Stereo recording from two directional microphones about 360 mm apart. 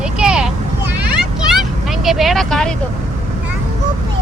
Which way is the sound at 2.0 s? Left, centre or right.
Centre.